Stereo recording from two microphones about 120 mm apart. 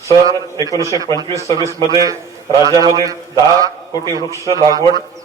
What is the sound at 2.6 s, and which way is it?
Speech, 30° right (ahead or behind).